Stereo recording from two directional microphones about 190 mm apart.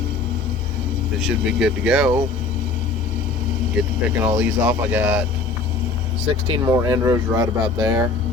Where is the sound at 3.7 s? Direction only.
5° right (ahead or behind).